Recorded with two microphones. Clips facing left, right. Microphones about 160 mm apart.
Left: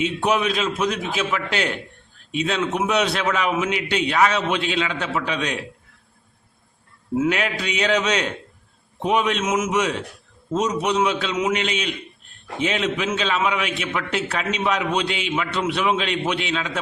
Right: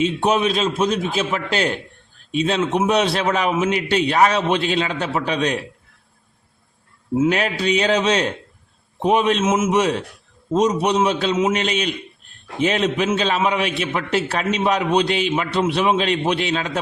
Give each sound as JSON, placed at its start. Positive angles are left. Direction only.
{"t": 0.0, "sound": "a man's voice", "side_deg": -30}
{"t": 7.3, "sound": "a man's voice", "side_deg": -35}